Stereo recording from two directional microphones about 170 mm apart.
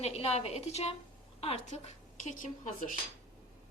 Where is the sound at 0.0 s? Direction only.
35° left (ahead or behind).